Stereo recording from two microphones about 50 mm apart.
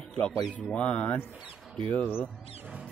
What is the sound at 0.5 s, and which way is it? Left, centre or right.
A man's voice, left.